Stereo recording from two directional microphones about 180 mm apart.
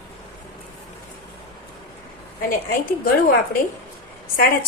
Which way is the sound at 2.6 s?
55° left (ahead or behind).